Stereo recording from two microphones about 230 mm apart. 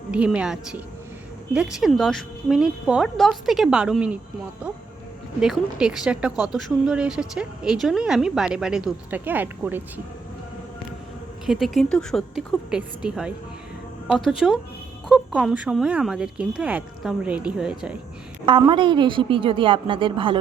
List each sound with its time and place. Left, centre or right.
0.1 s speech: centre
5.4 s speech: centre
11.4 s speech: centre
18.4 s a woman's voice: right